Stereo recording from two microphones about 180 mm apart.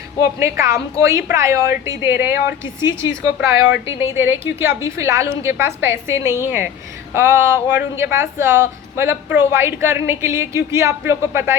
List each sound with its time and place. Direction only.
0.2 s speech: 15° right (ahead or behind)